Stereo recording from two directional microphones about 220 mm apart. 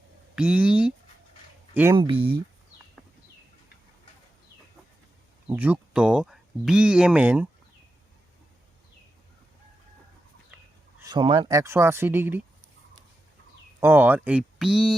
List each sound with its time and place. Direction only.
0.3 s speech: 5° right (ahead or behind)
2.0 s speech: 20° right (ahead or behind)
5.5 s speech: 10° right (ahead or behind)
11.0 s speech: 20° right (ahead or behind)
13.7 s speech: 10° right (ahead or behind)